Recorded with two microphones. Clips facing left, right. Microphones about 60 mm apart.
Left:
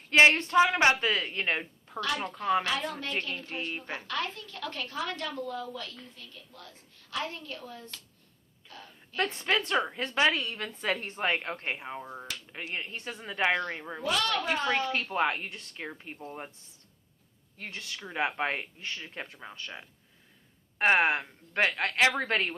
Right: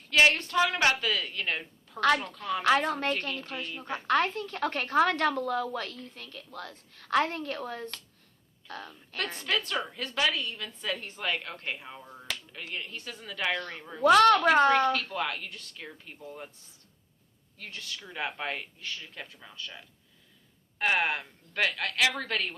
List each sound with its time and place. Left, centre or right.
0.1 s a woman's voice: left
2.0 s a woman's voice: right
2.2 s a woman's voice: left
2.6 s a woman's voice: right
3.6 s a woman's voice: left
4.0 s a woman's voice: right
9.4 s a woman's voice: left
14.0 s a woman's voice: right
14.9 s a woman's voice: left
17.6 s a woman's voice: left